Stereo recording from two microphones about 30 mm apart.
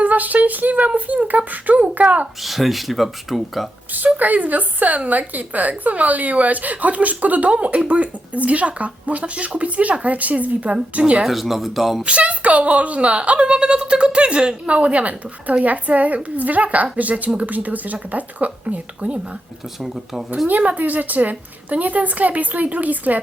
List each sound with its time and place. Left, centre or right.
0.0 s speech: right
0.9 s a woman's voice: right
1.8 s a woman's voice: right
2.4 s speech: centre
3.9 s a woman's voice: right
11.3 s speech: centre
12.0 s a woman's voice: right
14.8 s a woman's voice: right
20.5 s a woman's voice: right